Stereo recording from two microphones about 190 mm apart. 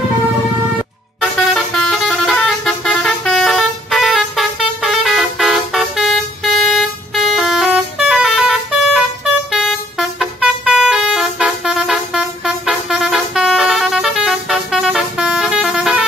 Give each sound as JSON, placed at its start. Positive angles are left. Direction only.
{"t": 1.5, "sound": "vehicle", "side_deg": 0}